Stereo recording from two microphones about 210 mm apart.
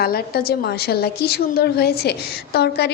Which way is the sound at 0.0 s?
45° left (ahead or behind).